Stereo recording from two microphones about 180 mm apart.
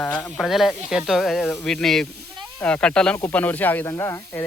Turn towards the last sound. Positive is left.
turn(degrees=15)  # may be behind; listen again after turning